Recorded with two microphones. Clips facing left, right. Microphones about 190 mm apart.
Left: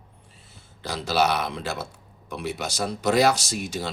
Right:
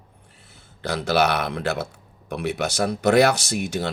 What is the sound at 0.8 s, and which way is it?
Speech, 60° right (ahead or behind).